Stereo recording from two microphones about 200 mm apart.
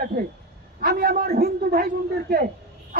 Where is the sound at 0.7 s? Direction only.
50° right (ahead or behind).